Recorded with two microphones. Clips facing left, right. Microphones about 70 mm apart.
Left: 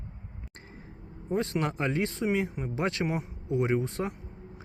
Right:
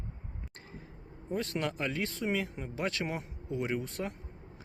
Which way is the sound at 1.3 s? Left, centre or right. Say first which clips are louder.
Left 5 dB; left.